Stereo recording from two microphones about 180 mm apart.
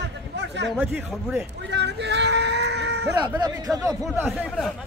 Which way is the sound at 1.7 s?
70° right (ahead or behind).